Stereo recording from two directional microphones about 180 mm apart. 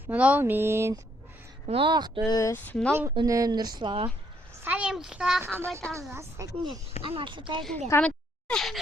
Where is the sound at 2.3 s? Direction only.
15° left (ahead or behind).